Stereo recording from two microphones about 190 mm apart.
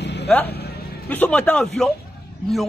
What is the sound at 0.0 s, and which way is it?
Vehicle, 65° left (ahead or behind).